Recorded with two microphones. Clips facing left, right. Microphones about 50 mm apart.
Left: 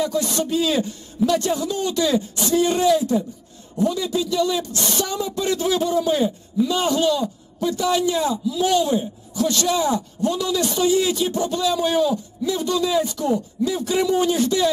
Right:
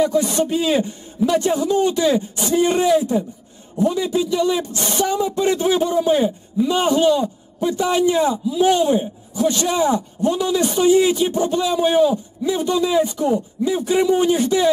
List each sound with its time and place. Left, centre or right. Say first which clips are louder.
0.0 s a man's voice: right 5 dB; right